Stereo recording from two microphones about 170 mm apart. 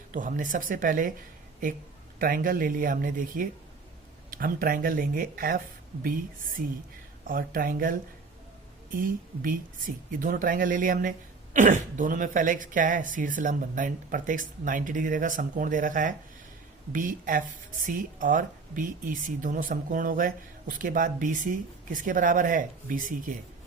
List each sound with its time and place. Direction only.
0.1 s speech: 50° right (ahead or behind)
2.1 s speech: 55° right (ahead or behind)
7.3 s speech: 55° right (ahead or behind)